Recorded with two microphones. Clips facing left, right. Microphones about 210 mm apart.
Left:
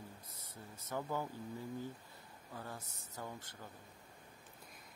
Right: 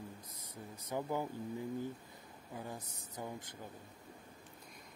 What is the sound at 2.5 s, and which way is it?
Speech, 15° right (ahead or behind).